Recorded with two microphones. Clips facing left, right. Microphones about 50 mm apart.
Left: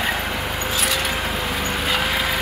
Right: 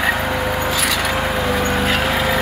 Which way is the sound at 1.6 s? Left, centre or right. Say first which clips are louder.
Right 5 dB; right.